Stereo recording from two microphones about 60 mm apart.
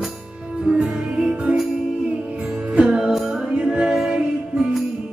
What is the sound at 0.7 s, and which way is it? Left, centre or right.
Music, centre.